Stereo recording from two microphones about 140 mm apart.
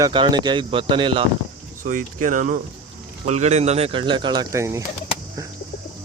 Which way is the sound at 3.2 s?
55° right (ahead or behind).